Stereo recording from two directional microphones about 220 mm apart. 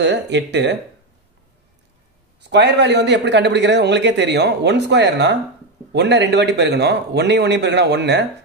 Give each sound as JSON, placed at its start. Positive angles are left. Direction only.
{"t": 0.0, "sound": "a man's voice", "side_deg": -50}
{"t": 2.5, "sound": "a man's voice", "side_deg": -50}